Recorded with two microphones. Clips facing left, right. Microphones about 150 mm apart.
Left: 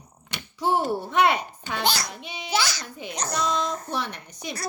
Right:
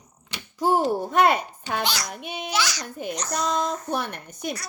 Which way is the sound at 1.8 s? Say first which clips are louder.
Left 4 dB; 30° left (ahead or behind).